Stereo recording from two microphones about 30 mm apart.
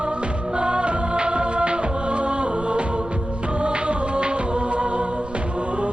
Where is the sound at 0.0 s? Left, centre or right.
Right.